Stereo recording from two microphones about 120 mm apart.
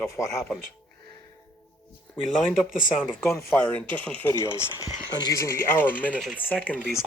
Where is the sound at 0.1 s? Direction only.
25° left (ahead or behind).